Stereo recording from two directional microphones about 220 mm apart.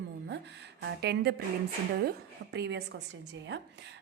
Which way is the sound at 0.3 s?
50° right (ahead or behind).